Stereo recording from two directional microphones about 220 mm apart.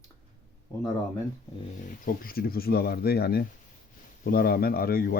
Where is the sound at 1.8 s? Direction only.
40° left (ahead or behind).